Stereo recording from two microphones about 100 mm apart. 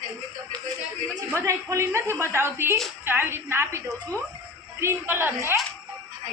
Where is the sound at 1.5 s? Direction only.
30° right (ahead or behind).